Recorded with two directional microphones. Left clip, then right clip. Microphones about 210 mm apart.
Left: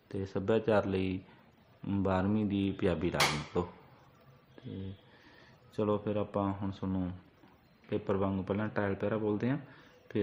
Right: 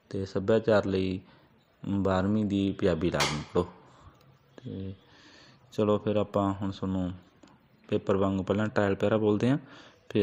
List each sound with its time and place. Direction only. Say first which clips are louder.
0.1 s speech: right 5 dB; 20° right (ahead or behind)
5.7 s a man's voice: right 6 dB; 30° right (ahead or behind)